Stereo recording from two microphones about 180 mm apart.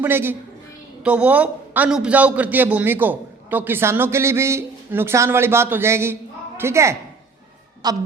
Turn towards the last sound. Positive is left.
turn(degrees=-20)  # may be behind; listen again after turning